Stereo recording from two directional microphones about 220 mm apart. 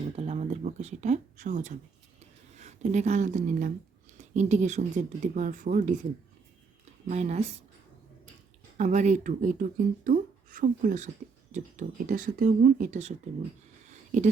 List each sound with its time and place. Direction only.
0.2 s speech: 30° right (ahead or behind)
7.1 s speech: 30° right (ahead or behind)
8.8 s speech: 35° right (ahead or behind)